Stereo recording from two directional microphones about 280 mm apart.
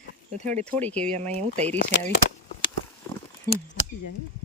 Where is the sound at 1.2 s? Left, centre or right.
Right.